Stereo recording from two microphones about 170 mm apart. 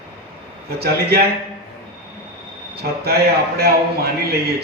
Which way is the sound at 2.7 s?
70° right (ahead or behind).